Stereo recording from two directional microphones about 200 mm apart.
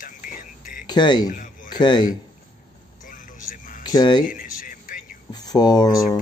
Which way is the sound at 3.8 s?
20° left (ahead or behind).